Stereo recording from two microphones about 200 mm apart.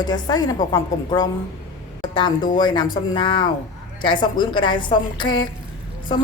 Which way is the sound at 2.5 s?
20° left (ahead or behind).